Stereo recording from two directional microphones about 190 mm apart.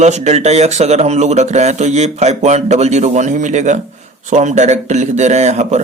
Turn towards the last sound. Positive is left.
turn(degrees=-35)  # may be behind; listen again after turning